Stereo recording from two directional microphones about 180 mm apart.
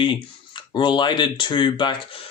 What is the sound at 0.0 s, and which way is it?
Speech, 30° left (ahead or behind).